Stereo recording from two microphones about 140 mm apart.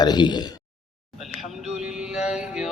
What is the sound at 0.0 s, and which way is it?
Speech, 30° left (ahead or behind).